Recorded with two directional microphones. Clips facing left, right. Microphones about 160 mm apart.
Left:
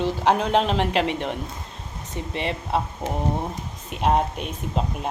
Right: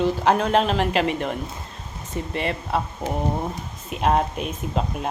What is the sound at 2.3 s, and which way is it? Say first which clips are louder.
Speech: even; 20° left (ahead or behind).